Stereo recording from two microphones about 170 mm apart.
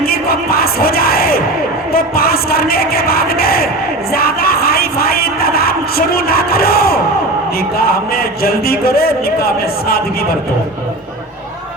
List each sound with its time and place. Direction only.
0.0 s crowd: 60° left (ahead or behind)
1.9 s a sound: 60° left (ahead or behind)
4.1 s music: 60° left (ahead or behind)
7.9 s a man's voice: 65° left (ahead or behind)